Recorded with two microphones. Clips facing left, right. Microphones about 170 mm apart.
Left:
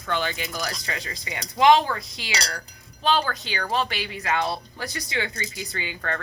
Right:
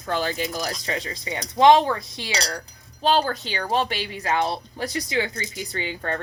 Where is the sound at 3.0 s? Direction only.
40° right (ahead or behind).